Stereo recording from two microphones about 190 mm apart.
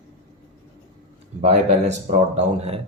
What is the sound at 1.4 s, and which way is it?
Speech, 35° right (ahead or behind).